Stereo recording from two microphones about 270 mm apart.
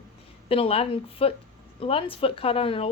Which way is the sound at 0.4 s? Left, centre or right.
Left.